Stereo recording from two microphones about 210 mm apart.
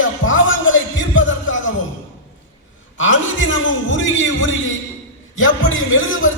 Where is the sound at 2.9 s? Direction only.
65° left (ahead or behind).